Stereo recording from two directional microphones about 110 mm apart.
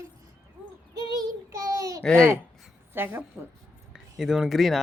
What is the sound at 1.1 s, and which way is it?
Child singing, 30° right (ahead or behind).